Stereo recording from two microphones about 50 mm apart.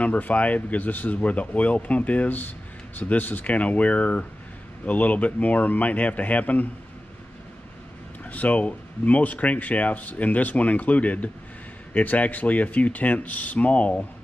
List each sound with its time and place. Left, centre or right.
0.0 s speech: left
8.3 s speech: left